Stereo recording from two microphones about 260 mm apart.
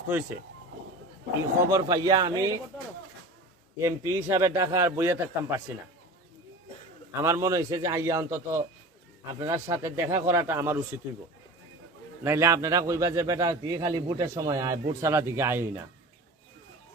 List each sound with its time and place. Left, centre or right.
1.7 s speech: centre
3.8 s speech: centre
7.1 s speech: centre
12.2 s speech: centre